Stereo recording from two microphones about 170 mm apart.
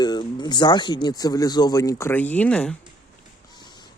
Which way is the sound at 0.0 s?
25° left (ahead or behind).